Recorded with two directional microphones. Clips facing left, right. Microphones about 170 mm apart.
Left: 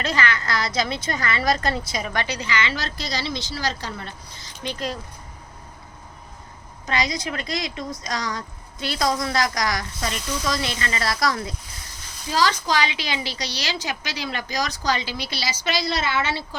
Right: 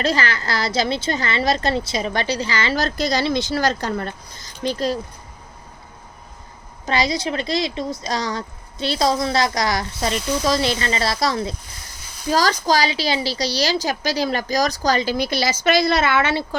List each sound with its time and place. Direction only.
0.0 s a woman's voice: 35° right (ahead or behind)
6.8 s speech: 30° right (ahead or behind)
12.3 s a woman's voice: 40° right (ahead or behind)